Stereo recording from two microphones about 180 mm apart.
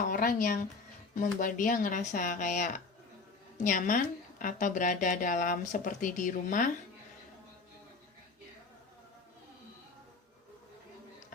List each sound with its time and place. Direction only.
0.1 s a woman's voice: 50° left (ahead or behind)